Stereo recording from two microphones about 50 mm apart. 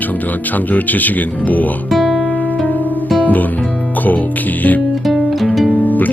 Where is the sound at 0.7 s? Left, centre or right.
Left.